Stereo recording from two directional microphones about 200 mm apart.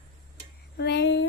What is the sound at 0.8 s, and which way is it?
Speech, 60° left (ahead or behind).